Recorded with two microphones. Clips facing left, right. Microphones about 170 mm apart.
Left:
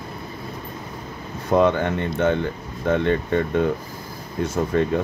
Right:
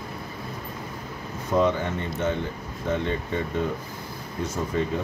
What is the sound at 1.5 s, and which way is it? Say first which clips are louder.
Speech: left 5 dB; 65° left (ahead or behind).